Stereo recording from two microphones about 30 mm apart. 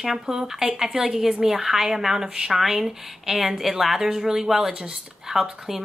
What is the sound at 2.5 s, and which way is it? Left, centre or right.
A woman's voice, centre.